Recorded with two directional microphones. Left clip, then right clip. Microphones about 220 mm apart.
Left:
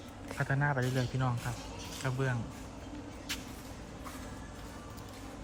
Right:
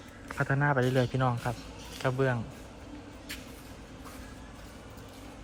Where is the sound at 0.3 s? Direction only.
Centre (ahead or behind).